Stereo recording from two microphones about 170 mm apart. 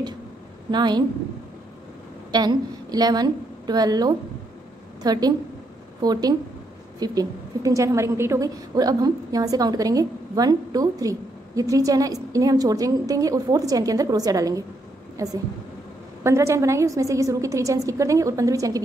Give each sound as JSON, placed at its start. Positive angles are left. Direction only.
{"t": 0.7, "sound": "a woman's voice", "side_deg": -25}
{"t": 2.3, "sound": "a woman's voice", "side_deg": -25}